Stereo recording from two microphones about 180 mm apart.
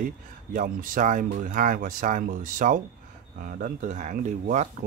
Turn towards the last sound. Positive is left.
turn(degrees=-40)  # may be behind; listen again after turning